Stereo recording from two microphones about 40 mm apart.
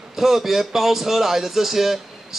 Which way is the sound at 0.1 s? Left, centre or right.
Centre.